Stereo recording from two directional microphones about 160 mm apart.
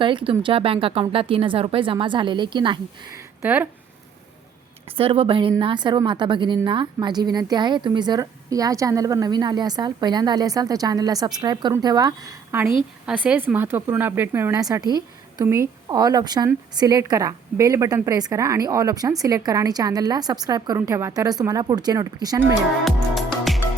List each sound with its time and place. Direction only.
0.0 s speech: 30° right (ahead or behind)
3.2 s a sound: 15° right (ahead or behind)
4.9 s a woman's voice: 35° right (ahead or behind)
22.8 s music: centre (ahead or behind)